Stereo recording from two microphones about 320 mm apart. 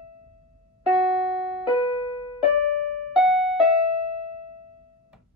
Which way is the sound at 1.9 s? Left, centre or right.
Centre.